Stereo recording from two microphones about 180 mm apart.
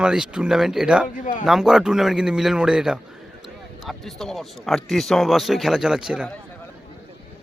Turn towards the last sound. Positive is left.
turn(degrees=-5)  # may be behind; listen again after turning